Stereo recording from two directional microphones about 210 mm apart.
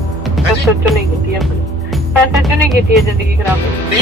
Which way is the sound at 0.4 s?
Centre (ahead or behind).